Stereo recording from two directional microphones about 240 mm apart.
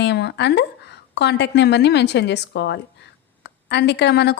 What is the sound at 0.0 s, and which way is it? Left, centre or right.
A woman's voice, left.